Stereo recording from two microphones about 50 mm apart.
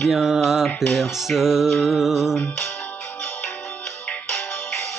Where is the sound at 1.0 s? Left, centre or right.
Centre.